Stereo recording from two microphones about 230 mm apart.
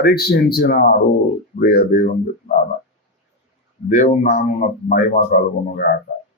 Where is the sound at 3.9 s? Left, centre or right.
Left.